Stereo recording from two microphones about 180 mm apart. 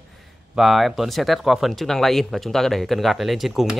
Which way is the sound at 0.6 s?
Centre (ahead or behind).